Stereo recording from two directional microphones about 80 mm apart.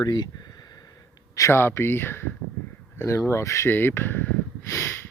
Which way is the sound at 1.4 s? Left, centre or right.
Left.